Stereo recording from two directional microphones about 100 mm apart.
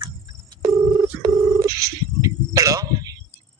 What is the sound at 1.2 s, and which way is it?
Telephone dialing, 35° right (ahead or behind).